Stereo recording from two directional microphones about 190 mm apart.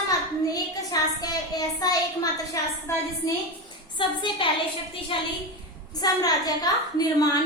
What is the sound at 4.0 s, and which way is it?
A woman's voice, 25° left (ahead or behind).